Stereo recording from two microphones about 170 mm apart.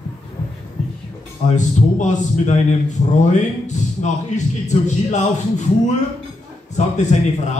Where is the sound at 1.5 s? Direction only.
45° left (ahead or behind).